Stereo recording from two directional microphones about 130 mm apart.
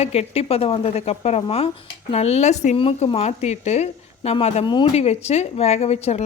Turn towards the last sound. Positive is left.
turn(degrees=55)  # may be behind; listen again after turning